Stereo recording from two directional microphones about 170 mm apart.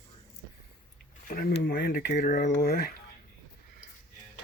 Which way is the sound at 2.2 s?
45° left (ahead or behind).